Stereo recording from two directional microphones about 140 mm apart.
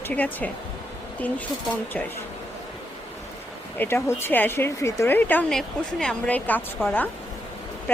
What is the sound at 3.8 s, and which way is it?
Speech, 15° left (ahead or behind).